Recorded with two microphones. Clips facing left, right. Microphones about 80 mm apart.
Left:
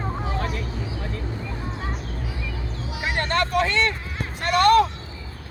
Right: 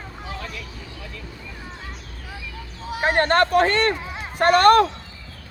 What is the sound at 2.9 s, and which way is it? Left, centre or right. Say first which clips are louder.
Speech: right 7 dB; right.